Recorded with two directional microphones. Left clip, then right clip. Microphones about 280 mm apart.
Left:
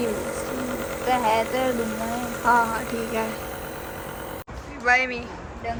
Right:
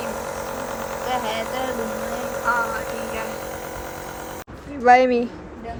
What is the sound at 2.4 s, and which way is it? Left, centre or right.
Music, centre.